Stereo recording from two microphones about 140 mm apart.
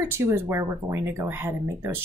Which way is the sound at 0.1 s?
20° right (ahead or behind).